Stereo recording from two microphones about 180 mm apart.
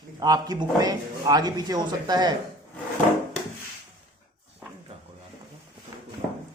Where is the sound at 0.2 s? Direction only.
20° right (ahead or behind).